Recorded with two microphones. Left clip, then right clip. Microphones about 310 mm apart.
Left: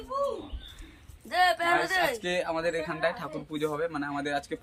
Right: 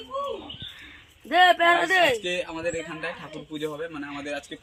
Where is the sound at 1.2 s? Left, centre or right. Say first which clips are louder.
Right 7 dB; right.